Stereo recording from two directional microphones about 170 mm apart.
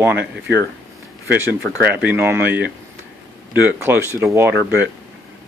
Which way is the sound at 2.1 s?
10° right (ahead or behind).